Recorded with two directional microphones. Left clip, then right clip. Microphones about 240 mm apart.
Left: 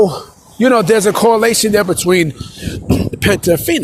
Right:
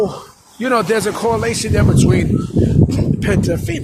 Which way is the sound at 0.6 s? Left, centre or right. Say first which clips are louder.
Left 5 dB; left.